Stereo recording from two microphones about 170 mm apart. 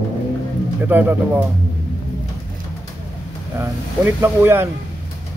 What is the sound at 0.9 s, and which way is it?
Speech, 10° right (ahead or behind).